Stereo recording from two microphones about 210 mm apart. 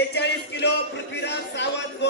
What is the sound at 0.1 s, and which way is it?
Music, 55° left (ahead or behind).